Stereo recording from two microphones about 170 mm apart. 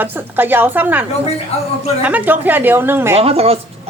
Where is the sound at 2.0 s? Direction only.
10° right (ahead or behind).